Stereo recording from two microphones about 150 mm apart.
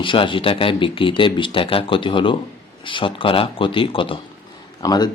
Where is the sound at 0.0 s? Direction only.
35° left (ahead or behind).